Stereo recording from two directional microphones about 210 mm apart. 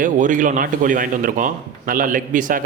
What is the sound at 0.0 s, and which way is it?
A man's voice, 40° right (ahead or behind).